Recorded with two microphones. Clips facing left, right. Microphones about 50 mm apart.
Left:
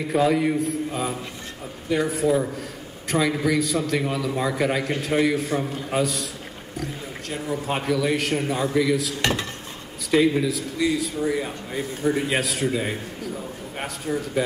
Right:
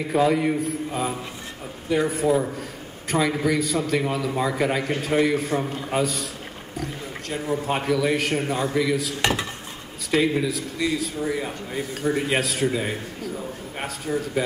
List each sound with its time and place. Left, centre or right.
0.1 s a man's voice: centre
9.2 s dishes: right
10.2 s a man's voice: centre